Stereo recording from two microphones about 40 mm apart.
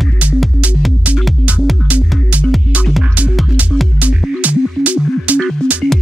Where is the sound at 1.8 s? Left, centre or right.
Right.